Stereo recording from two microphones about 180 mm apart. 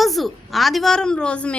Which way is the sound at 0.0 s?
Centre (ahead or behind).